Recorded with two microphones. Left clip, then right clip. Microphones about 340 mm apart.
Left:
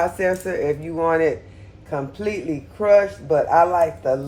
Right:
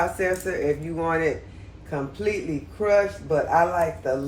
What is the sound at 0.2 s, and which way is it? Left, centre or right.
Speech, left.